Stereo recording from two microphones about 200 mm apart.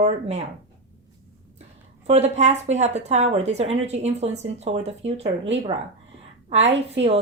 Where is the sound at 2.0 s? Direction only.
35° right (ahead or behind).